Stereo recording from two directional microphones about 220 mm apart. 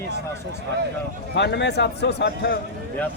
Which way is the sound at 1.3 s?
50° left (ahead or behind).